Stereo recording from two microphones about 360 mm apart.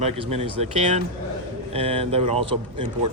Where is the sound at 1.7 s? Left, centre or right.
Centre.